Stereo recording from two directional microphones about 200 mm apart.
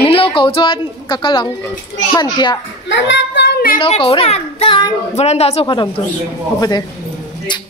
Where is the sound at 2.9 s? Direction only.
65° left (ahead or behind).